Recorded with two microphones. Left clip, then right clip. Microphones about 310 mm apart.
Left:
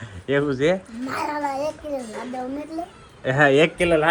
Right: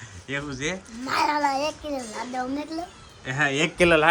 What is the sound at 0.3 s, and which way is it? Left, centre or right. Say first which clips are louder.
Speech: left 10 dB; centre.